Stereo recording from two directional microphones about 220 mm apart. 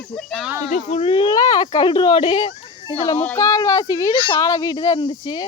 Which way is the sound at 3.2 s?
15° left (ahead or behind).